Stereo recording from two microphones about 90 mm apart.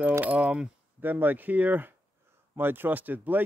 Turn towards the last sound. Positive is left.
turn(degrees=-20)  # may be behind; listen again after turning